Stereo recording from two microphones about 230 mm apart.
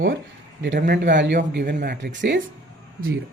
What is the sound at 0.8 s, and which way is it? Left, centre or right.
Speech, right.